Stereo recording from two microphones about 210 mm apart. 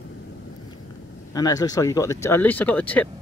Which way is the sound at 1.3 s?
15° left (ahead or behind).